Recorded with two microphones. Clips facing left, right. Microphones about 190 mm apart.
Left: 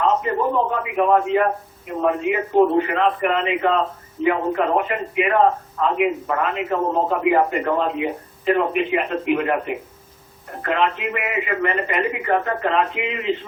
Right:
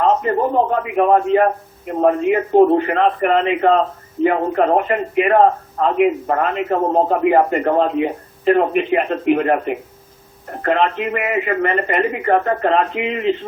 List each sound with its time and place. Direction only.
0.0 s a man's voice: 45° right (ahead or behind)